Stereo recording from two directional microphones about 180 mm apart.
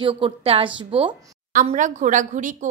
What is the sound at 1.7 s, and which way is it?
Speech, 45° right (ahead or behind).